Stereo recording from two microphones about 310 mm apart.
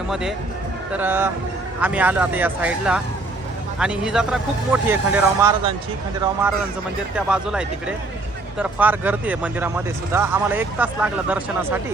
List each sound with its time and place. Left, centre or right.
0.1 s speech: centre